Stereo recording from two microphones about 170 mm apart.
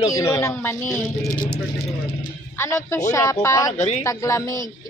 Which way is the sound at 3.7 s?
45° left (ahead or behind).